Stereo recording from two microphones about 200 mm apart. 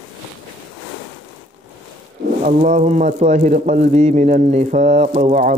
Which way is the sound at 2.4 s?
35° right (ahead or behind).